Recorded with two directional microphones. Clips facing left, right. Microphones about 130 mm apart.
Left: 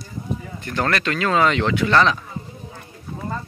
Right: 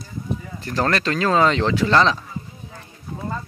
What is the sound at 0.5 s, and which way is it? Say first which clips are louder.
Speech: right 1 dB; 30° right (ahead or behind).